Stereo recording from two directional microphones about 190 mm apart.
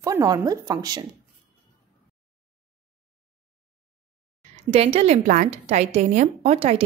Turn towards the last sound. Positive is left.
turn(degrees=-35)  # may be behind; listen again after turning